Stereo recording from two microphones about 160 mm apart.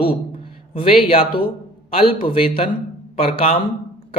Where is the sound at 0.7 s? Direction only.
35° left (ahead or behind).